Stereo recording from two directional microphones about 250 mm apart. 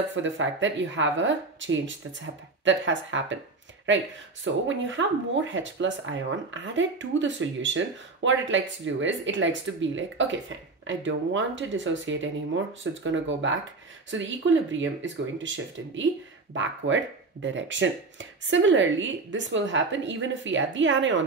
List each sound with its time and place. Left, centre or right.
0.1 s speech: right
4.6 s speech: right